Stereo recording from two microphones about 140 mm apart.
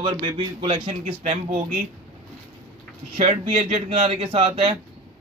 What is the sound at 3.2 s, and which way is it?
Speech, 55° right (ahead or behind).